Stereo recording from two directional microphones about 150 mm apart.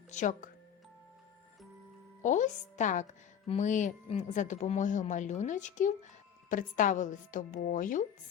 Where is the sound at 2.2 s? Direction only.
55° left (ahead or behind).